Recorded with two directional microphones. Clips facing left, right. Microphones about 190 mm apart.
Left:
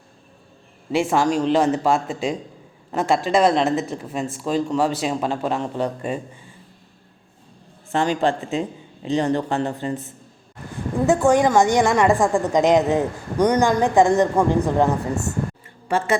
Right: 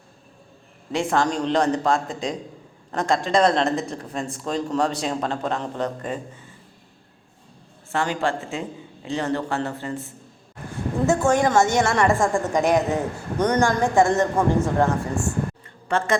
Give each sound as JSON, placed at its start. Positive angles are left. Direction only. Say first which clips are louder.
{"t": 0.9, "sound": "a woman's voice", "louder": "left 3 dB", "side_deg": 10}
{"t": 7.9, "sound": "a woman's voice", "louder": "left 4 dB", "side_deg": 20}
{"t": 15.9, "sound": "a woman's voice", "louder": "left 2 dB", "side_deg": 10}